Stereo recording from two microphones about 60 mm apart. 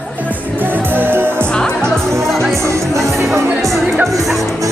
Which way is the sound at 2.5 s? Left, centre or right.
Right.